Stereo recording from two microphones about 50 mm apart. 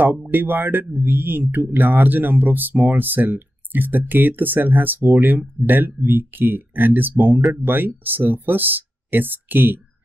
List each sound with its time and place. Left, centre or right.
0.3 s speech: right